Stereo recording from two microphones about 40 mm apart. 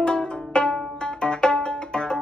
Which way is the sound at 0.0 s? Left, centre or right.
Left.